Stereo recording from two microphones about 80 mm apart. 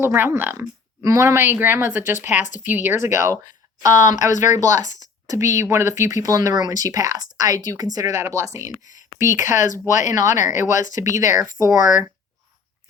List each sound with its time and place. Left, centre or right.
0.0 s speech: right
1.0 s speech: right
5.4 s speech: right